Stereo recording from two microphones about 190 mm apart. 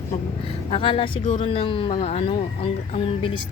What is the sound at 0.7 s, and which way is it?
Speech, 30° left (ahead or behind).